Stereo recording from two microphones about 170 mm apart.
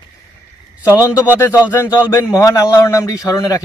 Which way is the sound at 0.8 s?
15° left (ahead or behind).